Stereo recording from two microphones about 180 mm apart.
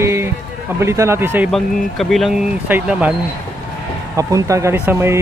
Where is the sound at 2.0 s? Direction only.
Centre (ahead or behind).